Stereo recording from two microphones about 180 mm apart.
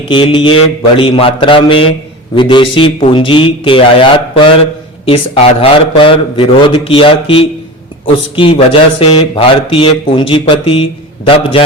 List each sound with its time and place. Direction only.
0.1 s speech: 30° left (ahead or behind)